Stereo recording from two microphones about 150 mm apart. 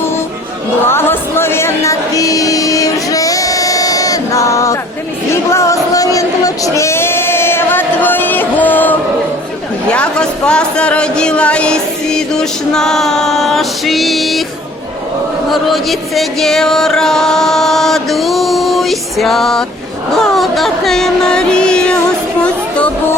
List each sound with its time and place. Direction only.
0.9 s music: 15° left (ahead or behind)
5.5 s a sound: 20° left (ahead or behind)
9.9 s speech: 5° left (ahead or behind)
15.7 s speech: centre (ahead or behind)